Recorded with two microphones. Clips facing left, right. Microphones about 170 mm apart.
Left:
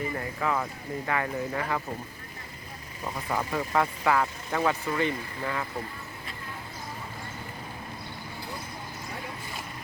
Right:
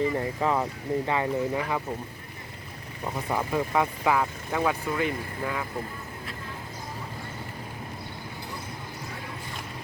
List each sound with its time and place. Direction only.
0.3 s speech: 25° right (ahead or behind)
3.2 s speech: 10° right (ahead or behind)